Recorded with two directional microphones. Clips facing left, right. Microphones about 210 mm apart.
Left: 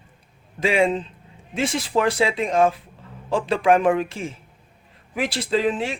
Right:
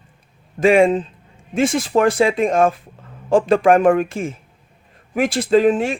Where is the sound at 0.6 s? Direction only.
50° right (ahead or behind).